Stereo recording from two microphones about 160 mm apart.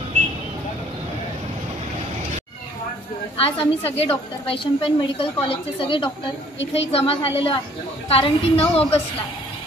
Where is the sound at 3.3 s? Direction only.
35° left (ahead or behind).